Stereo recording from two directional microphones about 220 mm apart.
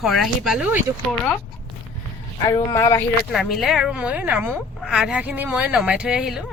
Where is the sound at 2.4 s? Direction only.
15° left (ahead or behind).